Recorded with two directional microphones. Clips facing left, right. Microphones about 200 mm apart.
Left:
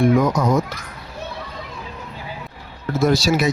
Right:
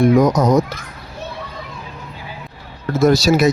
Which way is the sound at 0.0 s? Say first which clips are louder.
Right 4 dB; 40° right (ahead or behind).